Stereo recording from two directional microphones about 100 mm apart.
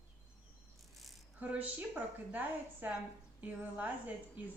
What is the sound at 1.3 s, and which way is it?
Speech, 15° right (ahead or behind).